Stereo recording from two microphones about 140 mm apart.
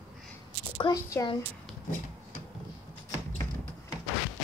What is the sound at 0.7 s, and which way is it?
Speech, 25° left (ahead or behind).